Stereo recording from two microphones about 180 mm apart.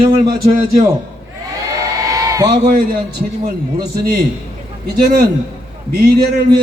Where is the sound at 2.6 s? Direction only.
50° right (ahead or behind).